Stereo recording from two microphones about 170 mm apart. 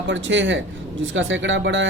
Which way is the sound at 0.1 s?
90° right.